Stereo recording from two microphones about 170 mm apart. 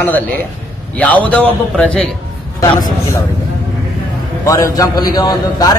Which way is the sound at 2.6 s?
20° left (ahead or behind).